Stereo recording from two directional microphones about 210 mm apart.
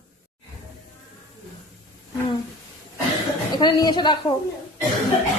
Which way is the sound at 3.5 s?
20° left (ahead or behind).